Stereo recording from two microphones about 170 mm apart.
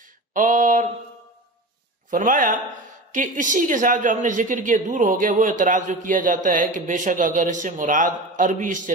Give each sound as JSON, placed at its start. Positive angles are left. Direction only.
{"t": 0.3, "sound": "speech", "side_deg": -50}
{"t": 2.0, "sound": "speech", "side_deg": -50}